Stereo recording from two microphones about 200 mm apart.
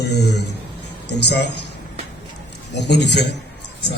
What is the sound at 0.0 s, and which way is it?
A man's voice, 55° left (ahead or behind).